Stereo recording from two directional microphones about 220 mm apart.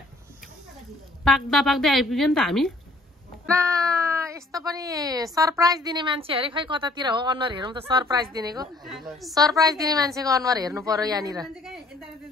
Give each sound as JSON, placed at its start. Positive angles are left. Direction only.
{"t": 1.2, "sound": "a woman's voice", "side_deg": 0}
{"t": 3.4, "sound": "speech", "side_deg": -15}
{"t": 11.4, "sound": "a woman's voice", "side_deg": 0}